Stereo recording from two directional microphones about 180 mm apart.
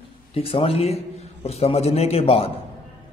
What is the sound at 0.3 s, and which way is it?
A man's voice, 35° left (ahead or behind).